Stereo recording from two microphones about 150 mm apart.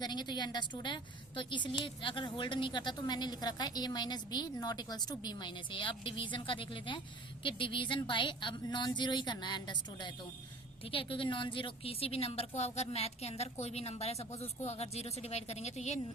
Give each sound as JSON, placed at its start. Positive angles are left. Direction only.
{"t": 0.0, "sound": "a woman's voice", "side_deg": 30}